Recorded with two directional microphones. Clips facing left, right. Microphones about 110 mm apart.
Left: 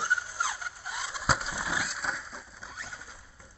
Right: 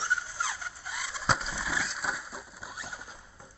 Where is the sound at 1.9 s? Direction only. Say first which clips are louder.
Right 1 dB; 5° right (ahead or behind).